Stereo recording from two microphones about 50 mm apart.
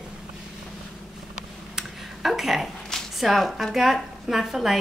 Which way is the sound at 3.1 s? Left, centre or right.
Centre.